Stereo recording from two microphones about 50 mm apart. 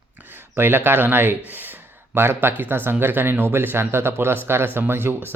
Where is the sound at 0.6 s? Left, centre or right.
Right.